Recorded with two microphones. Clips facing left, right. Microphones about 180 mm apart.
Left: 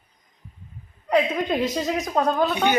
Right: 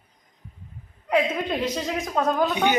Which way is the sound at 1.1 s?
45° left (ahead or behind).